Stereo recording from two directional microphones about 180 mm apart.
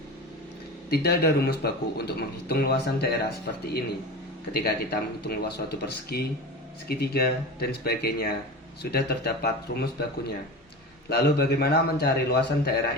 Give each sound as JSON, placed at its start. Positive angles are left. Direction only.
{"t": 0.9, "sound": "speech", "side_deg": 60}
{"t": 4.5, "sound": "speech", "side_deg": 60}